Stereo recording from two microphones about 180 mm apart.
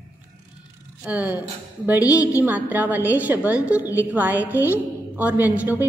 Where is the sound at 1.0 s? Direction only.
10° right (ahead or behind).